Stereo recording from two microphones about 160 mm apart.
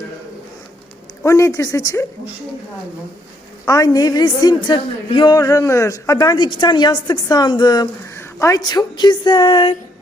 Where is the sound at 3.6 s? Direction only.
20° left (ahead or behind).